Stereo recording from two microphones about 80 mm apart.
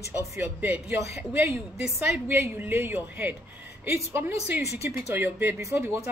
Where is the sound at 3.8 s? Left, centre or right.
Right.